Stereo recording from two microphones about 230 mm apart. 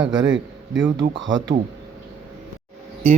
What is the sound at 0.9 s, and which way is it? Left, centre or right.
Speech, right.